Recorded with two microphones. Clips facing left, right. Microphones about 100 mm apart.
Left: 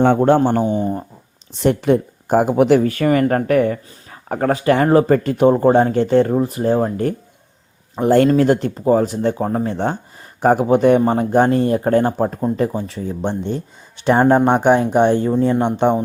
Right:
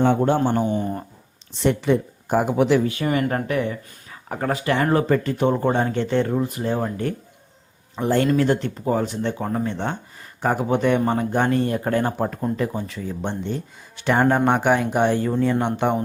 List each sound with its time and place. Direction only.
0.0 s speech: 55° left (ahead or behind)
0.7 s speech: 25° left (ahead or behind)
1.5 s speech: 45° left (ahead or behind); by 16.0 s 30° left (ahead or behind)